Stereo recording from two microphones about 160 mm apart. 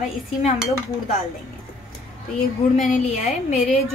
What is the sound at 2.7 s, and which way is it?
A woman's voice, 50° left (ahead or behind).